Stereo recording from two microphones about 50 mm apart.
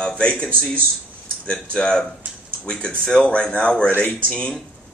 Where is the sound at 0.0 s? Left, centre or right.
Centre.